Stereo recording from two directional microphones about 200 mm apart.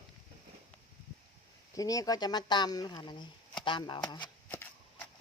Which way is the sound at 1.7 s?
15° left (ahead or behind).